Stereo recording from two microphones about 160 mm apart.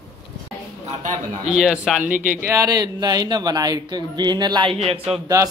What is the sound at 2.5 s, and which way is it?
Speech, 20° right (ahead or behind).